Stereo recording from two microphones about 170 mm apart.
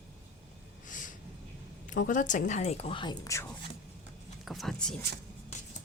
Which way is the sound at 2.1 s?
50° left (ahead or behind).